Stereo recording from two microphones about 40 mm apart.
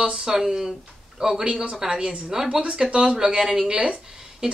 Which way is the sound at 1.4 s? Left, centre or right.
Right.